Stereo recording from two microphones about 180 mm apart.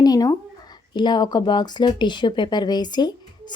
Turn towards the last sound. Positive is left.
turn(degrees=25)  # may be behind; listen again after turning